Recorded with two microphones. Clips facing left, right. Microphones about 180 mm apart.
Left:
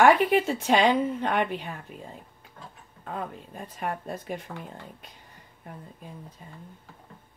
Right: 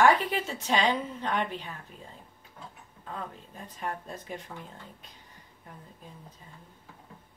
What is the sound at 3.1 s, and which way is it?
A woman's voice, 60° left (ahead or behind).